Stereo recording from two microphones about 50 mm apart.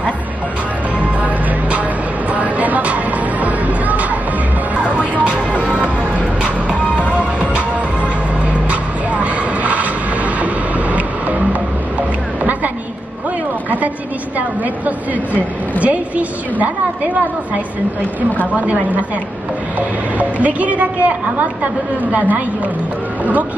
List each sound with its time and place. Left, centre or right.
2.3 s vehicle: right
3.4 s music: right
5.2 s music: right
6.4 s music: left
7.2 s music: right
15.8 s a sound: right
18.5 s a woman's voice: right
20.2 s a woman's voice: right